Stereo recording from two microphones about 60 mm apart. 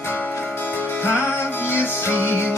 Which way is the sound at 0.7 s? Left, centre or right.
Left.